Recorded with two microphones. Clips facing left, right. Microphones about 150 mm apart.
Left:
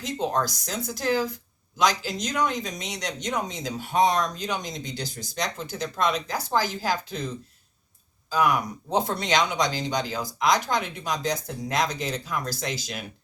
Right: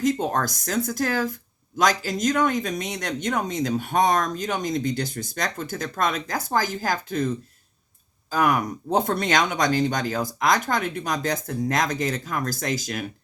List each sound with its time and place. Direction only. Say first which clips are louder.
0.0 s speech: right 4 dB; 50° right (ahead or behind)
8.3 s speech: right 1 dB; 50° right (ahead or behind)